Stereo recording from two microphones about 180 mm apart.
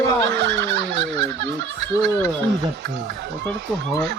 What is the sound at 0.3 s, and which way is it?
Turkey, 80° right.